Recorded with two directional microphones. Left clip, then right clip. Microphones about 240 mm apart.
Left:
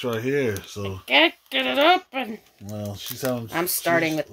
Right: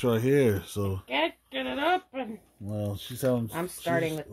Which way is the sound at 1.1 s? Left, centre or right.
Left.